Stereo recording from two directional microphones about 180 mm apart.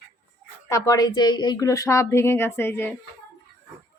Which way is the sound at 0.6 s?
15° left (ahead or behind).